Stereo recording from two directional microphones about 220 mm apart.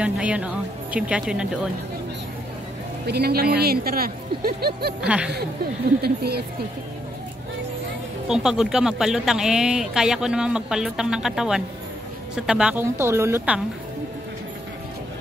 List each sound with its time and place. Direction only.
0.0 s speech: 5° right (ahead or behind)
3.1 s speech: 45° right (ahead or behind)
5.0 s speech: 5° right (ahead or behind)
6.0 s speech: 45° right (ahead or behind)
8.3 s a woman's voice: 5° right (ahead or behind)